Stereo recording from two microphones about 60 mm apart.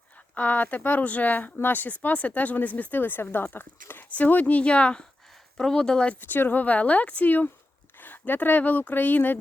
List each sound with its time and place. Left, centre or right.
0.3 s speech: left
4.1 s speech: left
6.1 s speech: left